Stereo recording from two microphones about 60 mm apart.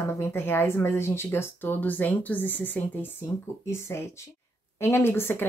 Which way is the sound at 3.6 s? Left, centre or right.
Left.